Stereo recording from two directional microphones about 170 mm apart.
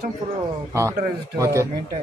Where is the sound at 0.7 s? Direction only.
15° right (ahead or behind).